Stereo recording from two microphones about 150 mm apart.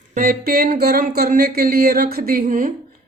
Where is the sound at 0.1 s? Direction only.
70° right (ahead or behind).